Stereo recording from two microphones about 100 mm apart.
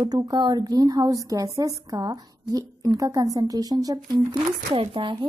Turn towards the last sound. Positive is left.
turn(degrees=-60)  # may be behind; listen again after turning